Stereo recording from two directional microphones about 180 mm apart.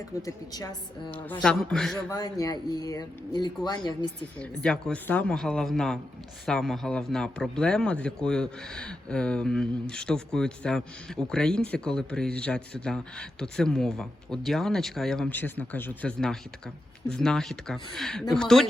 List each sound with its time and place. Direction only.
0.2 s a woman's voice: 20° left (ahead or behind)
1.3 s speech: 5° left (ahead or behind)
2.0 s a woman's voice: 20° left (ahead or behind)
4.4 s speech: 5° left (ahead or behind)